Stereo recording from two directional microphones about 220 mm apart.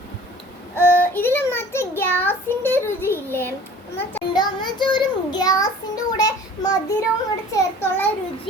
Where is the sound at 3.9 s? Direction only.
15° left (ahead or behind).